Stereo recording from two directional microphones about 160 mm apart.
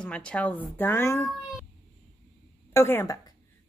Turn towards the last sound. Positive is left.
turn(degrees=15)  # may be behind; listen again after turning